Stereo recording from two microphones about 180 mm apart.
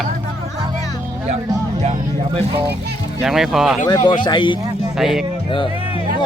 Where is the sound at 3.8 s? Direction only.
25° left (ahead or behind).